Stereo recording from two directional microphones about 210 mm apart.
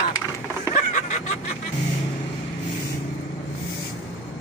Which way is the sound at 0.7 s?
35° left (ahead or behind).